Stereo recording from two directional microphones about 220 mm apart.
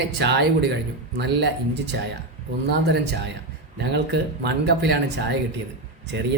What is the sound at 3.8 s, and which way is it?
Speech, 50° right (ahead or behind).